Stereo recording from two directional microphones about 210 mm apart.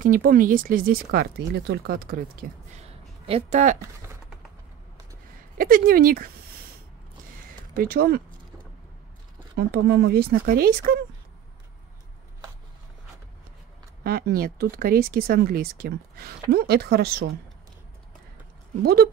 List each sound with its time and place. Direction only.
0.0 s speech: 40° right (ahead or behind)
3.3 s speech: 30° right (ahead or behind)
5.6 s speech: 40° right (ahead or behind)
7.7 s speech: 45° right (ahead or behind)
9.6 s speech: 50° right (ahead or behind)
14.0 s speech: 45° right (ahead or behind)
18.8 s speech: 50° right (ahead or behind)